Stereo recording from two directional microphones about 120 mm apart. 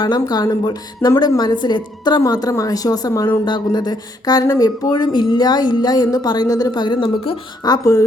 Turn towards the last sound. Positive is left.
turn(degrees=40)  # may be behind; listen again after turning